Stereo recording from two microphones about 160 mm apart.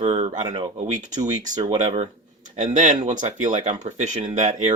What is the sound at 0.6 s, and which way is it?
Speech, 40° right (ahead or behind).